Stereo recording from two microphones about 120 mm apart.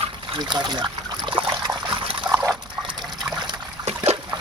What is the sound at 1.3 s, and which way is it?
Trickle, 45° right (ahead or behind).